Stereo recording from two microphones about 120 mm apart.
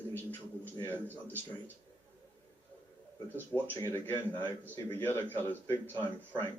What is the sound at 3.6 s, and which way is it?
A man's voice, 15° left (ahead or behind).